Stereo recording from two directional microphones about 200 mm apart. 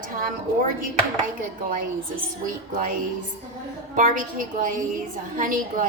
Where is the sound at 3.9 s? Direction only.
40° right (ahead or behind).